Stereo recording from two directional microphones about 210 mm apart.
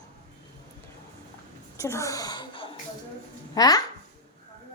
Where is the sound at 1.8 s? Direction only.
15° left (ahead or behind).